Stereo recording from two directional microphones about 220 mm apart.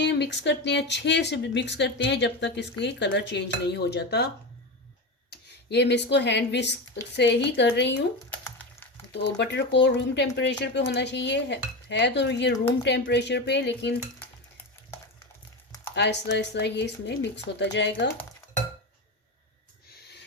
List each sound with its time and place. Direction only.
0.0 s speech: 50° left (ahead or behind)
5.3 s speech: 50° left (ahead or behind)
8.3 s a sound: 5° left (ahead or behind)
9.1 s speech: 50° left (ahead or behind)
16.0 s speech: 50° left (ahead or behind)